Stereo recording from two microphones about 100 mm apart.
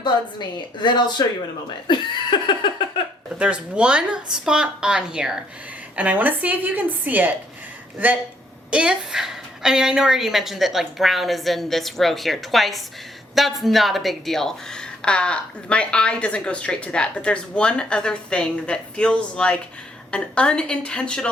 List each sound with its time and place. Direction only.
0.0 s a woman's voice: 50° left (ahead or behind)
1.9 s laughter: 50° left (ahead or behind)
3.3 s a woman's voice: 10° right (ahead or behind); by 21.2 s 10° left (ahead or behind)